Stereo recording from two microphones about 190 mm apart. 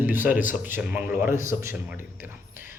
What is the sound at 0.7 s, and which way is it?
Speech, 10° right (ahead or behind).